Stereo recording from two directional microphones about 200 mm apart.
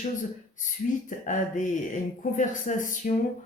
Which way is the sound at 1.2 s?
40° left (ahead or behind).